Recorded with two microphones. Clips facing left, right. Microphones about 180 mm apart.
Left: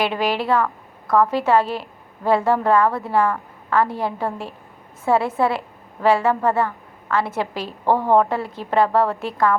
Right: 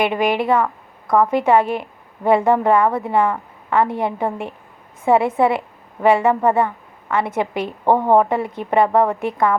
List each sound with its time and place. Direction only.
0.0 s a woman's voice: 15° right (ahead or behind)